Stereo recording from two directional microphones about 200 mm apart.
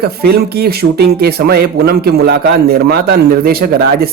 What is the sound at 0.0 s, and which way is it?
Speech, 50° right (ahead or behind).